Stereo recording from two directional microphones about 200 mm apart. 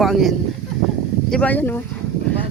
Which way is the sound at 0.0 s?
Centre (ahead or behind).